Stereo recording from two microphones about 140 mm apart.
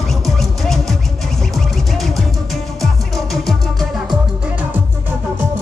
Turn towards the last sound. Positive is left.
turn(degrees=0)  # may be behind; listen again after turning